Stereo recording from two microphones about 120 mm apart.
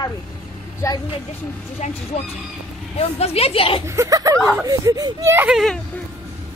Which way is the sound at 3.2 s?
55° left (ahead or behind).